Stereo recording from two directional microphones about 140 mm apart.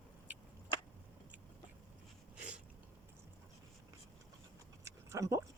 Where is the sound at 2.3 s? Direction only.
10° right (ahead or behind).